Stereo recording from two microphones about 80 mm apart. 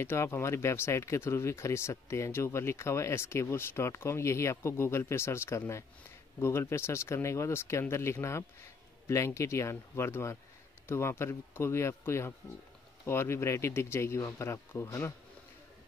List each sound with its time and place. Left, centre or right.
0.0 s speech: left